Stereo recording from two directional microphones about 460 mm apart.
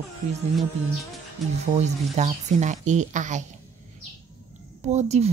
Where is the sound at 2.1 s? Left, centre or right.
Centre.